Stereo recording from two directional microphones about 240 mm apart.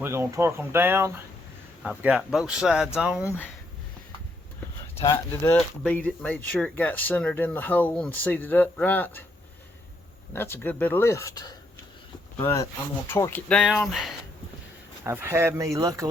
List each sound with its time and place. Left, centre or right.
0.0 s speech: centre
4.9 s speech: centre
10.3 s speech: centre
13.1 s speech: centre